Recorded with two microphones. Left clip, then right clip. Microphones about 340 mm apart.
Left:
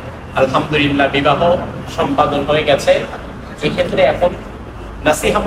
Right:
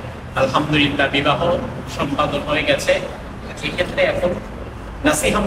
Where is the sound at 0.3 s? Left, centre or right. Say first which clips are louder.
Left 3 dB; left.